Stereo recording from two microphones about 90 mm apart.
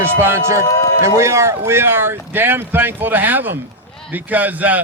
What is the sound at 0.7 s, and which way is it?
Speech, 35° left (ahead or behind).